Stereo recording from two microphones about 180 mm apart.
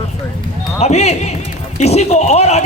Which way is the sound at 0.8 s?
35° left (ahead or behind).